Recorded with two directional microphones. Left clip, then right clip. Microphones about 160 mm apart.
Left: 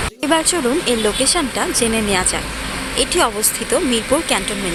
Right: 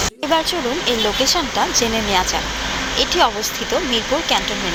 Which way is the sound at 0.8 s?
30° left (ahead or behind).